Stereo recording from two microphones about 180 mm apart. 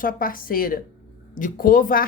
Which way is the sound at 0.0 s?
50° left (ahead or behind).